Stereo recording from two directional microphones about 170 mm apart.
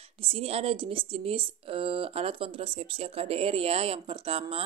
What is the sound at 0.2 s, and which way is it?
Speech, 35° right (ahead or behind).